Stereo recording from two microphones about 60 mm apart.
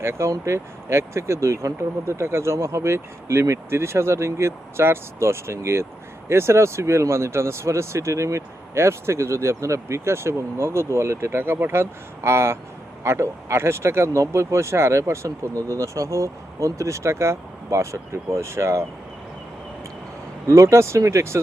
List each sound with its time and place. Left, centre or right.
0.0 s speech: right
20.5 s speech: right